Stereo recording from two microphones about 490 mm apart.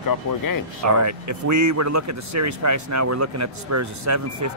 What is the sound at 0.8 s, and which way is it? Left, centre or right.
Speech, right.